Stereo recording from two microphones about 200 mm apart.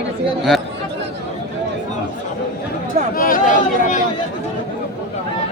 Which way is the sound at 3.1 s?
45° left (ahead or behind).